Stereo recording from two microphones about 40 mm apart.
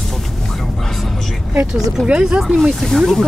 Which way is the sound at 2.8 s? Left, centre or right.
Centre.